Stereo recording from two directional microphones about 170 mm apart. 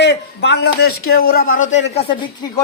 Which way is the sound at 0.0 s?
90° left.